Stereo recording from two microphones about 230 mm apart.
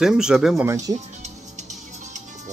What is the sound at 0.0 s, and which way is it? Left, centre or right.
Speech, centre.